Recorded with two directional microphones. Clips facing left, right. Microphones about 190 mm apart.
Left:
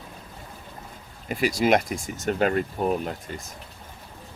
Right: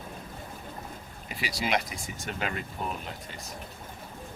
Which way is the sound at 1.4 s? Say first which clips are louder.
Left 9 dB; 50° left (ahead or behind).